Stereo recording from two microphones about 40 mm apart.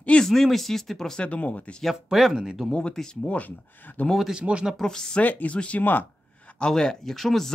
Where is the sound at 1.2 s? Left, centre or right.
Left.